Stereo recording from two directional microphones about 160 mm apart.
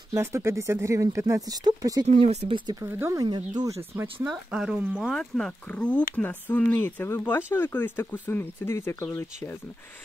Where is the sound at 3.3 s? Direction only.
25° right (ahead or behind).